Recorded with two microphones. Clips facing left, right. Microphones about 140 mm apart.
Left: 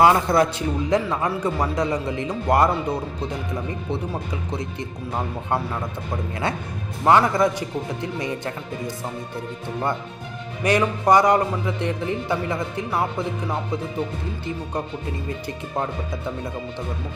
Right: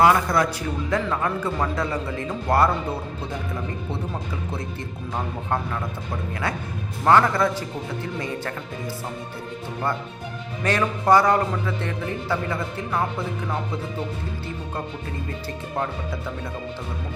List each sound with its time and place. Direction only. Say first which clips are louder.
0.0 s a man's voice: left 2 dB; 25° left (ahead or behind)
4.5 s a man's voice: left 2 dB; 15° left (ahead or behind)
10.6 s a man's voice: left 3 dB; 15° left (ahead or behind)